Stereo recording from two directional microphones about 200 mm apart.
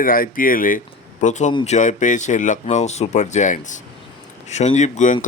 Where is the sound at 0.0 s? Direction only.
45° left (ahead or behind).